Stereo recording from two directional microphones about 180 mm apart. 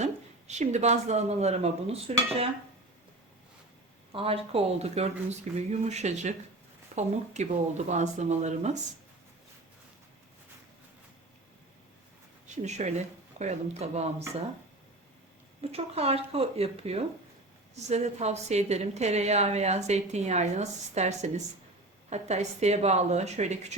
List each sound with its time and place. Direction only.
0.0 s speech: 40° right (ahead or behind)
4.1 s a woman's voice: 30° right (ahead or behind)
12.6 s a woman's voice: 40° right (ahead or behind)
15.6 s a woman's voice: 35° right (ahead or behind)